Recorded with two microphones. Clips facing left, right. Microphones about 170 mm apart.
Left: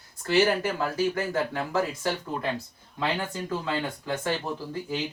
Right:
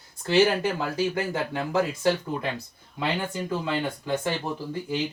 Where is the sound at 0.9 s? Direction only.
15° right (ahead or behind).